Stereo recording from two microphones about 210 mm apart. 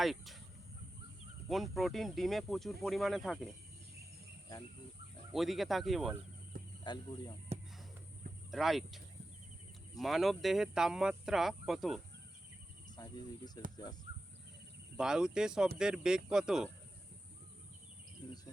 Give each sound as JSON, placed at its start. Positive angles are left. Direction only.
{"t": 0.0, "sound": "speech", "side_deg": 0}
{"t": 1.5, "sound": "speech", "side_deg": 0}
{"t": 5.3, "sound": "speech", "side_deg": 0}
{"t": 6.5, "sound": "cricket", "side_deg": -40}
{"t": 7.5, "sound": "music", "side_deg": -30}
{"t": 8.4, "sound": "speech", "side_deg": 0}
{"t": 10.0, "sound": "speech", "side_deg": 0}
{"t": 13.0, "sound": "speech", "side_deg": 20}
{"t": 14.9, "sound": "speech", "side_deg": -5}